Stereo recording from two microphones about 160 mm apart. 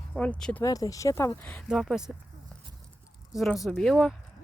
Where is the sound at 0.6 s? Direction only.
20° left (ahead or behind).